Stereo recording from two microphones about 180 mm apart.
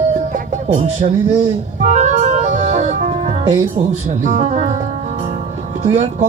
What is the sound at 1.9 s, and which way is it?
Organ, 40° right (ahead or behind).